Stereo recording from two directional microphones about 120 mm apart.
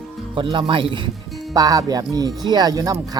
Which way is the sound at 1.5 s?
30° right (ahead or behind).